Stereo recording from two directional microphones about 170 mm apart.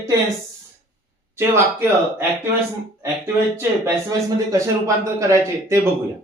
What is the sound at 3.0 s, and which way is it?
Speech, 15° right (ahead or behind).